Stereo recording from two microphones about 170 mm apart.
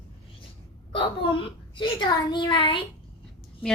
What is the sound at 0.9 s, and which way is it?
A child's voice, 30° left (ahead or behind).